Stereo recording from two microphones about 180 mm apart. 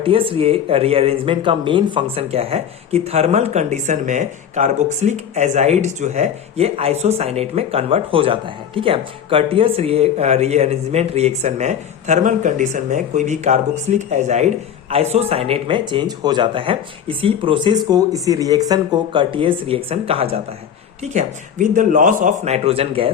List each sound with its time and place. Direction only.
0.0 s speech: 30° right (ahead or behind)